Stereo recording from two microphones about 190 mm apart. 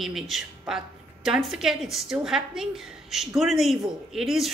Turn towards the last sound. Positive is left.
turn(degrees=0)  # may be behind; listen again after turning